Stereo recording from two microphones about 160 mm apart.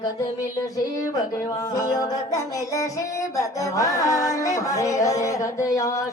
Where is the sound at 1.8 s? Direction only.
20° left (ahead or behind).